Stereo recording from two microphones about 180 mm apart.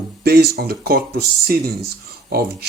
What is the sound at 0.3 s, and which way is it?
Speech, 60° right (ahead or behind).